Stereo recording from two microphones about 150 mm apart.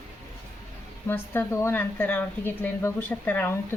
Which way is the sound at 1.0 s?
15° left (ahead or behind).